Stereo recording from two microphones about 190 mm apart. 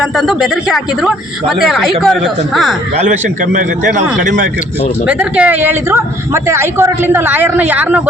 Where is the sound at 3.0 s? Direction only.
40° right (ahead or behind).